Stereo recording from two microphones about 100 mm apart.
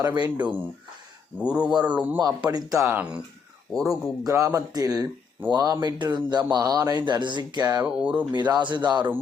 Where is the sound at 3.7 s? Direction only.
Centre (ahead or behind).